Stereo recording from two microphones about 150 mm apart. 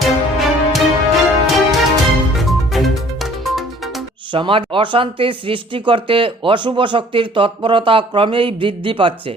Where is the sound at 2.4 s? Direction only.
Centre (ahead or behind).